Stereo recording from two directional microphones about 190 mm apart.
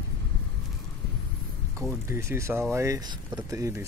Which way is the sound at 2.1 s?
15° right (ahead or behind).